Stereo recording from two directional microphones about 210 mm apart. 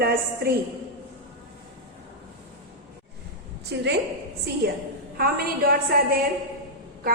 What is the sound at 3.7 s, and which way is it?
Speech, 55° right (ahead or behind).